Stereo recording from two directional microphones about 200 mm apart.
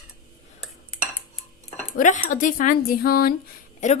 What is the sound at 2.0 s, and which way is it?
Speech, 40° left (ahead or behind).